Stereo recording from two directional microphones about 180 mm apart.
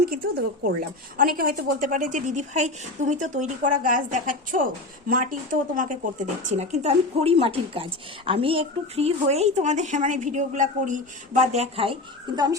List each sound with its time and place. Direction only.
0.0 s a woman's voice: 55° right (ahead or behind); by 11.9 s 35° right (ahead or behind)